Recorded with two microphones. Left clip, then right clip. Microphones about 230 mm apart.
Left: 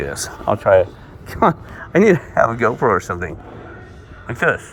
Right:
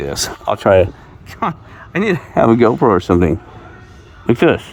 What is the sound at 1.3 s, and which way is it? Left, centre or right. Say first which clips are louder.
Speech: left 5 dB; centre.